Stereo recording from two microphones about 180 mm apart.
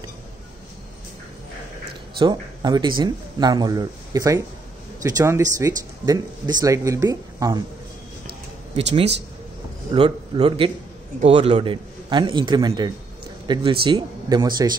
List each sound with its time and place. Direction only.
2.1 s a man's voice: 25° right (ahead or behind)
9.9 s a man's voice: 25° right (ahead or behind)